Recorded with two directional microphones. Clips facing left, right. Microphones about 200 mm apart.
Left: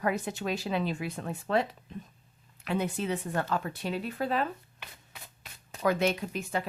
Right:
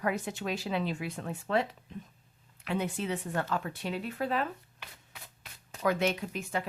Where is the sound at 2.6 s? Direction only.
40° left (ahead or behind).